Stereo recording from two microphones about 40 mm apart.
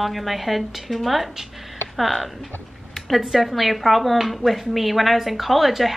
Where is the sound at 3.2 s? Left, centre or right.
Centre.